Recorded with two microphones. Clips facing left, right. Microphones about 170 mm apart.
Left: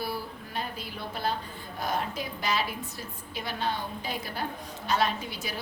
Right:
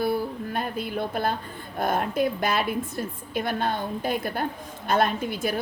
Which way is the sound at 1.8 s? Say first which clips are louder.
Right 8 dB; 55° right (ahead or behind).